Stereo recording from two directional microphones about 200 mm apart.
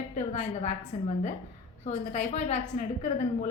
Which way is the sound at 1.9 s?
35° left (ahead or behind).